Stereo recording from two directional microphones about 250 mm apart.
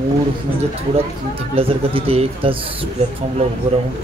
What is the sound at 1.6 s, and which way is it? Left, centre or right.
A man's voice, right.